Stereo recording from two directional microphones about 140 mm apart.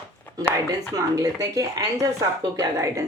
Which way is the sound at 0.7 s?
25° right (ahead or behind).